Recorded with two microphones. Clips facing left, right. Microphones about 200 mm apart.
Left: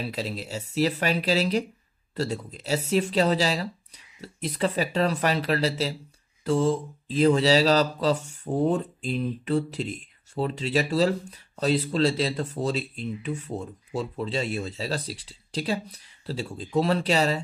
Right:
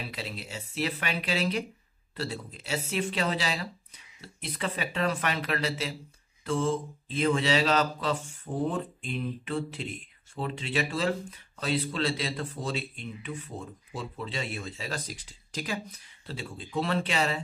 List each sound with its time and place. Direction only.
0.0 s speech: 40° left (ahead or behind)